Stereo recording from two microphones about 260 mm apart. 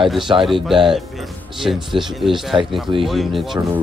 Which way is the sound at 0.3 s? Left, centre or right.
Centre.